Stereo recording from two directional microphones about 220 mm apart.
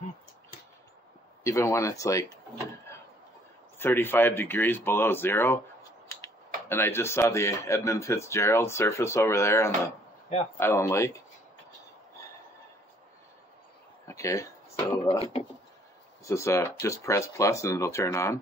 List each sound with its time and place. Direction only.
1.4 s speech: 15° left (ahead or behind)
6.7 s speech: 10° left (ahead or behind)
14.0 s speech: 15° left (ahead or behind)
15.0 s speech: 25° left (ahead or behind)
16.3 s speech: 15° left (ahead or behind)